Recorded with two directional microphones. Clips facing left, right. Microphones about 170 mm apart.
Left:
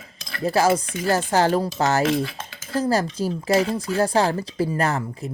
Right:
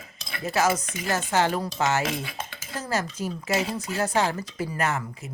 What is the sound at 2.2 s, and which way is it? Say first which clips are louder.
Dishes: left 3 dB; 10° right (ahead or behind).